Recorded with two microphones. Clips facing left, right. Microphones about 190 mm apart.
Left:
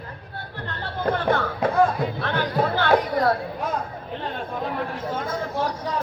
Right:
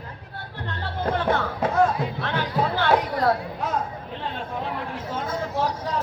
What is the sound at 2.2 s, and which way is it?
Music, 55° left (ahead or behind).